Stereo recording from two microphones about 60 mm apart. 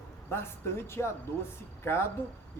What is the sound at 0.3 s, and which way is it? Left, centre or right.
Speech, left.